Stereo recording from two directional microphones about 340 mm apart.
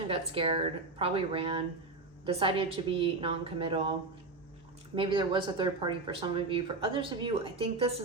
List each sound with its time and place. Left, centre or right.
0.1 s speech: centre
4.9 s speech: centre